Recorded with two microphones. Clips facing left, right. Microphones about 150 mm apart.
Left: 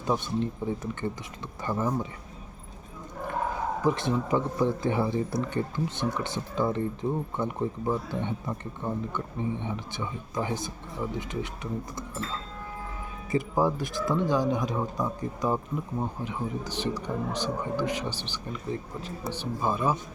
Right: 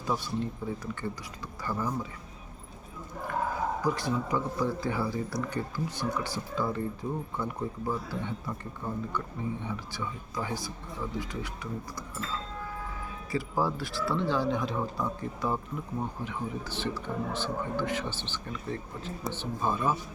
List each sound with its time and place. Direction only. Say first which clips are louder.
0.0 s speech: left 4 dB; 20° left (ahead or behind)
3.8 s speech: left 6 dB; 20° left (ahead or behind)
13.3 s speech: left 4 dB; 20° left (ahead or behind)